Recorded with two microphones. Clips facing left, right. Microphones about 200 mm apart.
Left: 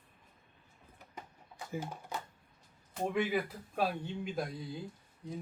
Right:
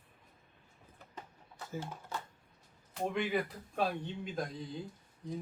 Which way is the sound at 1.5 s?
15° left (ahead or behind).